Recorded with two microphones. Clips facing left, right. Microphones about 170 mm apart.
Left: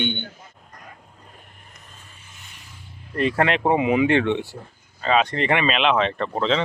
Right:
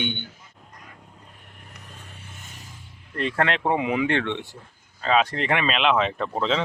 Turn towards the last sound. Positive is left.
turn(degrees=-5)  # may be behind; listen again after turning